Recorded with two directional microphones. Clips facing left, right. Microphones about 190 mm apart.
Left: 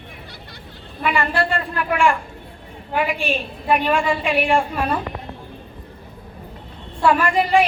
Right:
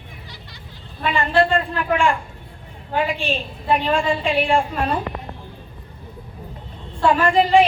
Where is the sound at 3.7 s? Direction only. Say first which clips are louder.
Even; 25° right (ahead or behind).